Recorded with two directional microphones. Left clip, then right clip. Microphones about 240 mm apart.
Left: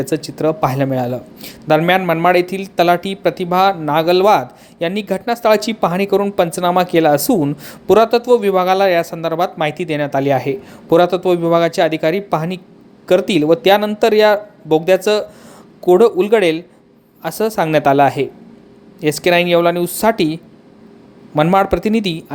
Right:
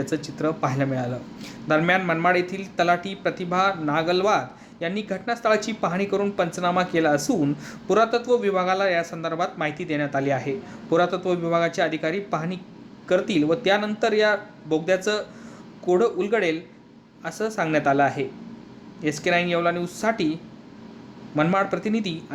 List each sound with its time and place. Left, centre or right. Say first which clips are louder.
0.0 s speech: left 9 dB; left